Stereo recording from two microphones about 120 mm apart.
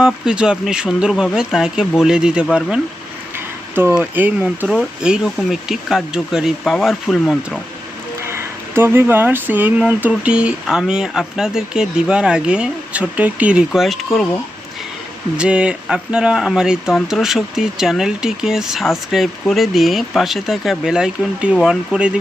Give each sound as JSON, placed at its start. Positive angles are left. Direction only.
{"t": 0.0, "sound": "speech", "side_deg": -5}
{"t": 3.3, "sound": "speech", "side_deg": -20}
{"t": 8.3, "sound": "speech", "side_deg": -20}
{"t": 15.4, "sound": "speech", "side_deg": -10}